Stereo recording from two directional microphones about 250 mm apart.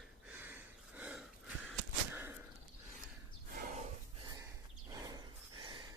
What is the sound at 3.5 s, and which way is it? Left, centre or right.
Snort, right.